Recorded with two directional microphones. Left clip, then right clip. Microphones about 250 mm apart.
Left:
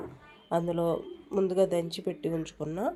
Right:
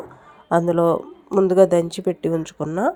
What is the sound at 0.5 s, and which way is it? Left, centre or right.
Speech, right.